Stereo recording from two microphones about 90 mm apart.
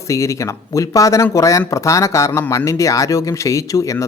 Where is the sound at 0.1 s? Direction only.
35° left (ahead or behind).